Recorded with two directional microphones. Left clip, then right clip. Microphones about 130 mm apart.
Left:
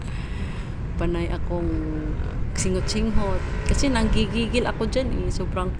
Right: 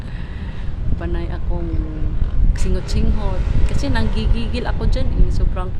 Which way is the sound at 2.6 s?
20° left (ahead or behind).